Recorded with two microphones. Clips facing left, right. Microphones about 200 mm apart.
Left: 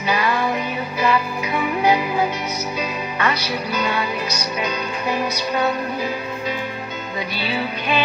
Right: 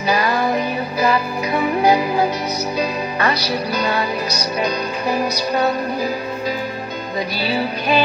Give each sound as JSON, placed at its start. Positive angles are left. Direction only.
{"t": 0.1, "sound": "music", "side_deg": -40}
{"t": 7.3, "sound": "music", "side_deg": -40}